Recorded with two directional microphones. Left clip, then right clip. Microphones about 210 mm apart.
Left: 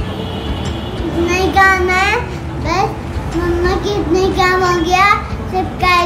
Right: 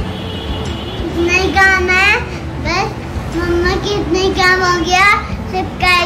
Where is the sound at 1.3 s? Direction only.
15° left (ahead or behind).